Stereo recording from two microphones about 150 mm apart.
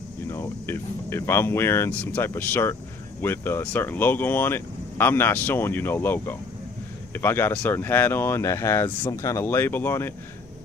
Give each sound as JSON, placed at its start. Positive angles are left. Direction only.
{"t": 0.3, "sound": "speech", "side_deg": 15}